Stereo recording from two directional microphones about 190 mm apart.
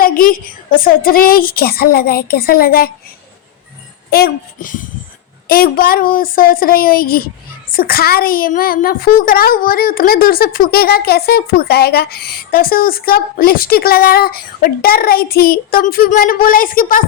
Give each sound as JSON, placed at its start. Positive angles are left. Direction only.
{"t": 0.0, "sound": "a woman's voice", "side_deg": 45}
{"t": 4.1, "sound": "a woman's voice", "side_deg": 50}